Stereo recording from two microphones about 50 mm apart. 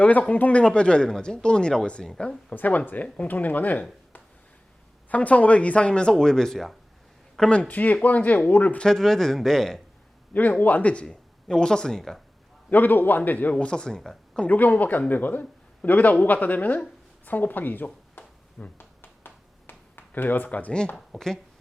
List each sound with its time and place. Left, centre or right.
0.0 s a man's voice: left
2.6 s a man's voice: left
5.0 s speech: left; by 6.7 s centre
7.7 s a man's voice: left
8.8 s speech: centre
10.3 s a man's voice: left
11.4 s speech: centre
12.7 s a man's voice: left
13.6 s speech: centre
14.5 s a man's voice: left
18.8 s a sound: left
20.9 s speech: centre